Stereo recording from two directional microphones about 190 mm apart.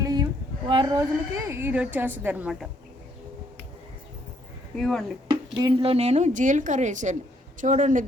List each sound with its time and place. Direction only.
0.0 s a sound: 20° right (ahead or behind)
0.7 s a woman's voice: 25° right (ahead or behind); by 2.6 s 5° right (ahead or behind)
4.8 s speech: centre (ahead or behind)
5.3 s a woman's voice: 20° right (ahead or behind); by 8.0 s 40° right (ahead or behind)